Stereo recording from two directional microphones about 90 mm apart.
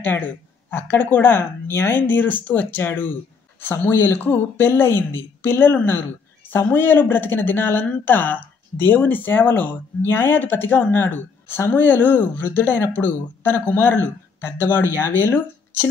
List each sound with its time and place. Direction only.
0.7 s speech: 20° left (ahead or behind)